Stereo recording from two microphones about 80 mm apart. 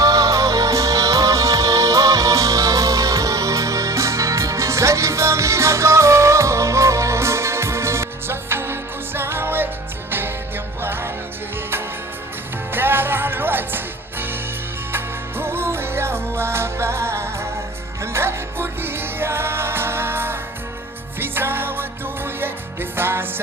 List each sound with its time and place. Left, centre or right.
0.0 s music: right
12.7 s music: right